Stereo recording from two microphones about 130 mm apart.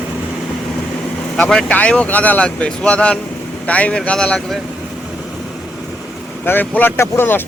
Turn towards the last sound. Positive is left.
turn(degrees=15)  # may be behind; listen again after turning